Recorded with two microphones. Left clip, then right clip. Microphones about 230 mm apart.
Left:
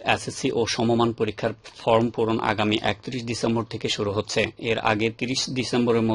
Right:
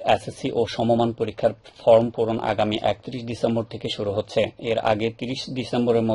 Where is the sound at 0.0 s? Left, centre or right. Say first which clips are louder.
Right 2 dB; left.